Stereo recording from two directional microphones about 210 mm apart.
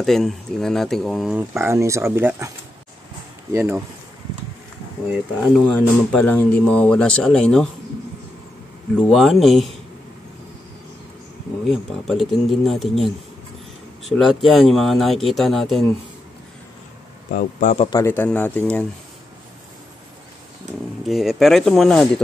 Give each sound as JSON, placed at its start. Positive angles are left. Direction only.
{"t": 0.0, "sound": "speech", "side_deg": 0}
{"t": 1.5, "sound": "speech", "side_deg": -15}
{"t": 3.5, "sound": "speech", "side_deg": -10}
{"t": 5.4, "sound": "speech", "side_deg": 5}
{"t": 9.1, "sound": "speech", "side_deg": 0}
{"t": 11.6, "sound": "speech", "side_deg": 0}
{"t": 17.3, "sound": "speech", "side_deg": 40}
{"t": 17.8, "sound": "speech", "side_deg": 15}
{"t": 21.0, "sound": "speech", "side_deg": 0}